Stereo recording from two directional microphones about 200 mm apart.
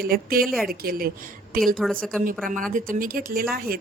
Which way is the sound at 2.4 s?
40° right (ahead or behind).